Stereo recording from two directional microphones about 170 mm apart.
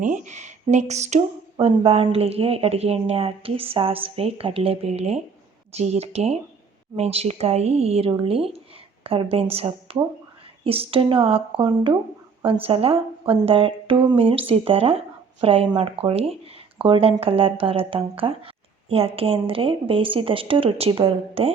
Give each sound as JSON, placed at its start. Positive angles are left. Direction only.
{"t": 0.0, "sound": "speech", "side_deg": -45}